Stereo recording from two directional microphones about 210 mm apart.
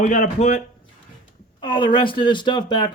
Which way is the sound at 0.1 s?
35° left (ahead or behind).